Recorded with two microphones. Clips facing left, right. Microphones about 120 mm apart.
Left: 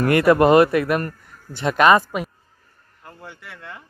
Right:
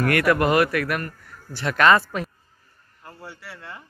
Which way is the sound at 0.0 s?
25° left (ahead or behind).